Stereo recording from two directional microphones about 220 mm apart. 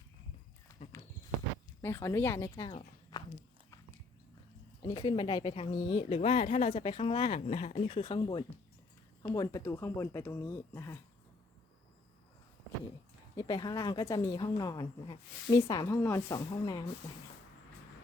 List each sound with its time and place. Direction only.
1.8 s a woman's voice: 10° left (ahead or behind)
2.7 s a sound: 20° left (ahead or behind)
4.9 s a woman's voice: 20° left (ahead or behind)
13.3 s a woman's voice: 20° left (ahead or behind)